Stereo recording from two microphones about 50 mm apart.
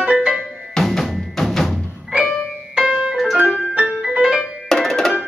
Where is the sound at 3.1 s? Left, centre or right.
Centre.